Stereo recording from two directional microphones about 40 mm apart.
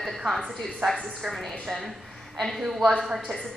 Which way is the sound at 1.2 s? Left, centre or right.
Centre.